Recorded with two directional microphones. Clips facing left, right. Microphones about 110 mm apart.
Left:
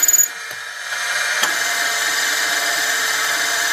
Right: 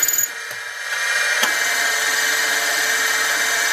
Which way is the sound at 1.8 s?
20° left (ahead or behind).